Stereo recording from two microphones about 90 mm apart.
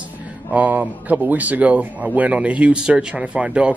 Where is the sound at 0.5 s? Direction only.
15° right (ahead or behind).